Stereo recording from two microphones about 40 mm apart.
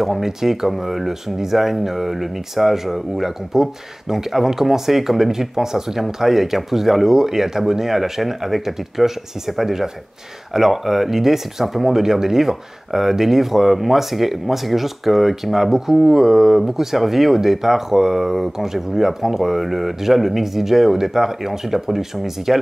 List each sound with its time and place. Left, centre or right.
0.0 s speech: centre